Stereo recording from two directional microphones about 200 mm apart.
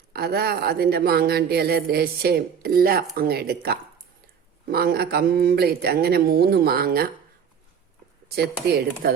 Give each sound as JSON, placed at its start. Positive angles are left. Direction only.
{"t": 0.1, "sound": "speech", "side_deg": -50}
{"t": 8.3, "sound": "speech", "side_deg": -50}